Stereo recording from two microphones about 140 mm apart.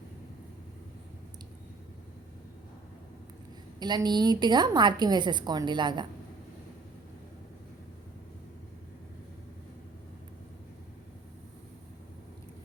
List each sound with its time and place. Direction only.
3.8 s a woman's voice: 30° right (ahead or behind)